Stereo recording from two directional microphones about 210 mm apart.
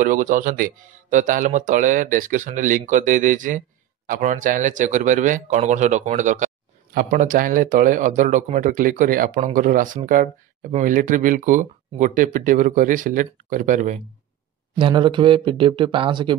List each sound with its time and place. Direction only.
0.0 s speech: 40° right (ahead or behind)
14.8 s speech: 25° right (ahead or behind)